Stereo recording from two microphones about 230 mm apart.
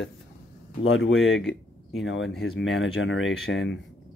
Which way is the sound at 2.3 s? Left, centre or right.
Centre.